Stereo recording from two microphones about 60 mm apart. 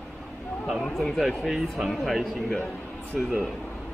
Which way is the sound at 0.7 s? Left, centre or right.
Centre.